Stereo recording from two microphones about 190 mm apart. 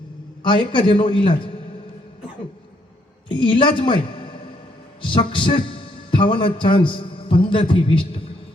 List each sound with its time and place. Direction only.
0.4 s a man's voice: 25° left (ahead or behind)
3.2 s a woman's voice: 25° left (ahead or behind)